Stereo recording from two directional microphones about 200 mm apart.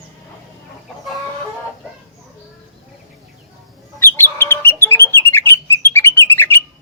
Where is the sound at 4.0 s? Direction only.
10° left (ahead or behind).